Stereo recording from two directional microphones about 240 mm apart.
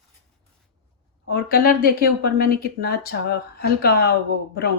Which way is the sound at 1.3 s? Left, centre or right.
Left.